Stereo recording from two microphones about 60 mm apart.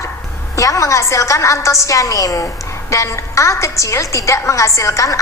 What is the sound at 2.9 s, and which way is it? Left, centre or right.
A woman's voice, left.